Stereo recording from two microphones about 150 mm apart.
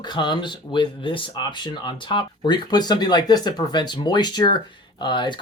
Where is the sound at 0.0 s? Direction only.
30° left (ahead or behind).